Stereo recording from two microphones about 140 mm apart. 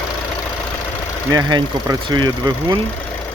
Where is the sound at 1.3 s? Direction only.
30° right (ahead or behind).